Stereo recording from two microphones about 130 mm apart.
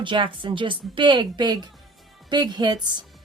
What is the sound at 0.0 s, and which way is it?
Speech, 40° right (ahead or behind).